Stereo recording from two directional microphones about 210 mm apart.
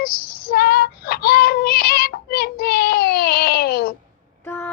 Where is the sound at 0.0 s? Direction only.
45° left (ahead or behind).